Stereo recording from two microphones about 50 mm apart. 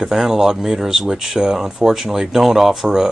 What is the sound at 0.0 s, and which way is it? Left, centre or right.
Speech, centre.